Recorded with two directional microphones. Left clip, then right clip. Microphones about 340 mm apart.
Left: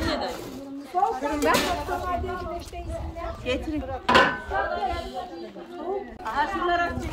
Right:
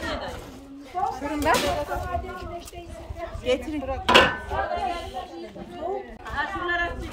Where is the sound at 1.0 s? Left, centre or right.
Left.